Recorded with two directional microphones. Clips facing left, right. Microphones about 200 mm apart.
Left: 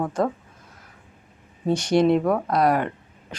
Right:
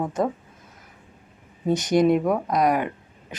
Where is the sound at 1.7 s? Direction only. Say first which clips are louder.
Even; 20° right (ahead or behind).